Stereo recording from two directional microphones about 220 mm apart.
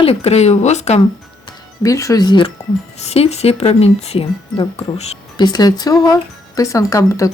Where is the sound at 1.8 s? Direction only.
15° left (ahead or behind).